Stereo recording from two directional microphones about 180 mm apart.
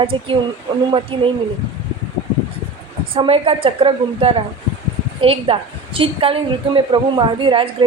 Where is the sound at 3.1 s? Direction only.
30° right (ahead or behind).